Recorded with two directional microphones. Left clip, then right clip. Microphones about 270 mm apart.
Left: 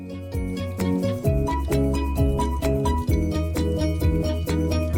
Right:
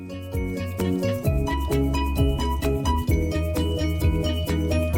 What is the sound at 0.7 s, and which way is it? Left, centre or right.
Music, centre.